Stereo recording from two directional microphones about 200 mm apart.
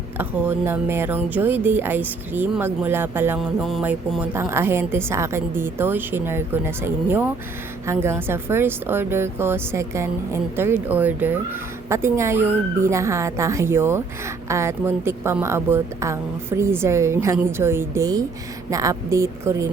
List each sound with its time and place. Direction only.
0.2 s speech: 10° right (ahead or behind)